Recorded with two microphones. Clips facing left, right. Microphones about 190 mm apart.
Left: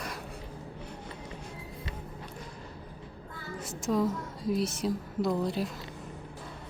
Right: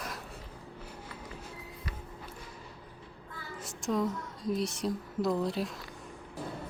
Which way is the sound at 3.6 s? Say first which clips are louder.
Left 3 dB; centre (ahead or behind).